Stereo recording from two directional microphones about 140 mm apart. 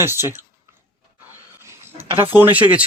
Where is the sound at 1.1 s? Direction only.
20° right (ahead or behind).